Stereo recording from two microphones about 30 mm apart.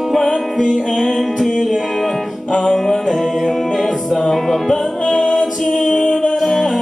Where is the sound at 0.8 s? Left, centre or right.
Centre.